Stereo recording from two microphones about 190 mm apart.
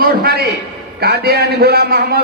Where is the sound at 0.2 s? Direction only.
55° right (ahead or behind).